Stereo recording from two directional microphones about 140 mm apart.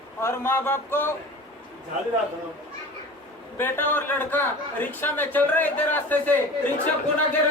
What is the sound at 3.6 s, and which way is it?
A man's voice, 15° left (ahead or behind).